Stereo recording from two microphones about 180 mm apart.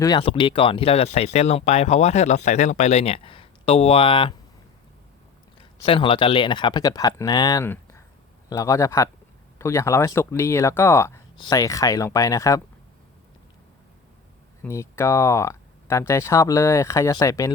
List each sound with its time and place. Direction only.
0.0 s speech: 25° left (ahead or behind)
5.8 s speech: 30° left (ahead or behind)
14.6 s speech: 15° left (ahead or behind)